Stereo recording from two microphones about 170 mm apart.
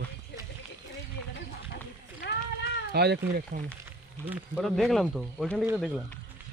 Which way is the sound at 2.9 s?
75° right (ahead or behind).